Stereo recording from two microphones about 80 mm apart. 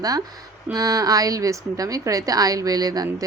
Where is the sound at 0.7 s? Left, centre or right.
Right.